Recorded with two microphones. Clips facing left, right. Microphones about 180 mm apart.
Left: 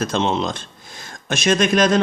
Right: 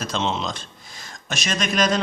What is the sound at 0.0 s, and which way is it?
A man's voice, 55° left (ahead or behind).